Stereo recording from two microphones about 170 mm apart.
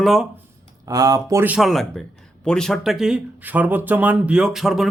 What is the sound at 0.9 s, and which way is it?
Speech, 20° right (ahead or behind).